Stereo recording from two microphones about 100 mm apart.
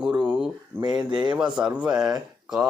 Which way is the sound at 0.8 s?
45° right (ahead or behind).